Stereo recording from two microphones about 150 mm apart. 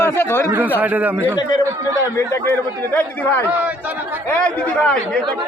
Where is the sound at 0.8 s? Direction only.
10° right (ahead or behind).